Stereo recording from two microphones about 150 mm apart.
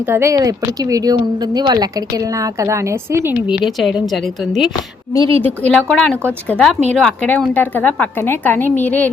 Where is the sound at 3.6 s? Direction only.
Centre (ahead or behind).